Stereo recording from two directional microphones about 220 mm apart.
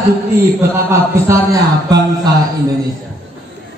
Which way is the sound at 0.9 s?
15° right (ahead or behind).